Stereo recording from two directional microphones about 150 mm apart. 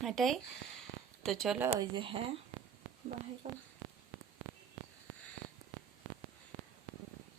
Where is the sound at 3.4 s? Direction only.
50° right (ahead or behind).